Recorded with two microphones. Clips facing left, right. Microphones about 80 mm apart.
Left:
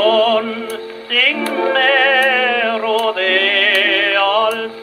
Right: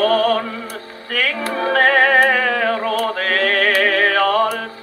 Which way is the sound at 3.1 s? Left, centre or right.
Right.